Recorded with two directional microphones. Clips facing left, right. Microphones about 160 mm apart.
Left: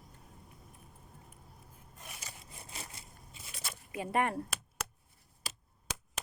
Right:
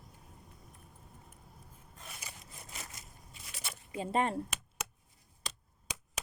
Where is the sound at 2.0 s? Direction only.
15° left (ahead or behind).